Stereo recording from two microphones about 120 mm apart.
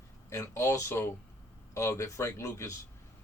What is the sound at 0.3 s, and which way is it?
Speech, 25° left (ahead or behind).